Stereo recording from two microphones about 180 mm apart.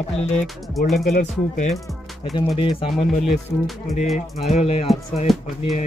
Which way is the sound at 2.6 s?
30° left (ahead or behind).